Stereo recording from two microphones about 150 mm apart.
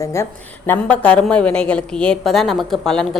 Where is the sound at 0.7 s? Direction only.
10° left (ahead or behind).